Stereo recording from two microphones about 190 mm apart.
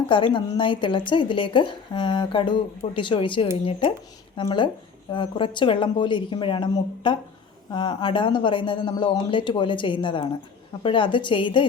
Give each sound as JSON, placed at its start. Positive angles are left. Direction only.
{"t": 0.3, "sound": "a woman's voice", "side_deg": 25}